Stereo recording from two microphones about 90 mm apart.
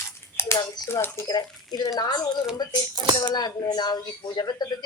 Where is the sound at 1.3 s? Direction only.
50° left (ahead or behind).